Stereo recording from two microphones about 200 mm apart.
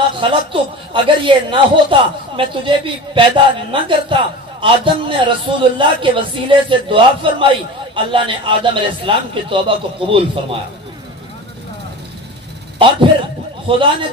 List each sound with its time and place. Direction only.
0.2 s a man's voice: 25° right (ahead or behind)
12.7 s a man's voice: 25° right (ahead or behind)